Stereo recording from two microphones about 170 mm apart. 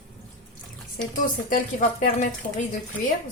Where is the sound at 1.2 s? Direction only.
50° left (ahead or behind).